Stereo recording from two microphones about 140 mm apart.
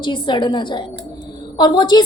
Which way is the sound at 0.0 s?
35° left (ahead or behind).